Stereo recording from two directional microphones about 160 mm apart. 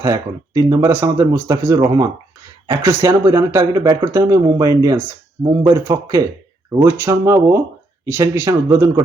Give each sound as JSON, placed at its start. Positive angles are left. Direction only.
{"t": 0.0, "sound": "speech", "side_deg": -20}